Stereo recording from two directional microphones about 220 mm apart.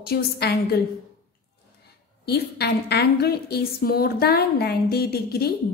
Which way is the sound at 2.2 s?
45° left (ahead or behind).